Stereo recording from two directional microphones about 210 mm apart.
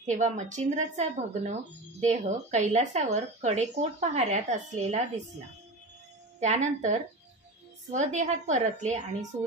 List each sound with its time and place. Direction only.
0.0 s speech: 35° right (ahead or behind)
6.4 s speech: 35° right (ahead or behind)